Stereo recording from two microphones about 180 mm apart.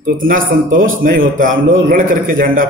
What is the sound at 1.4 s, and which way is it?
A man's voice, 50° right (ahead or behind).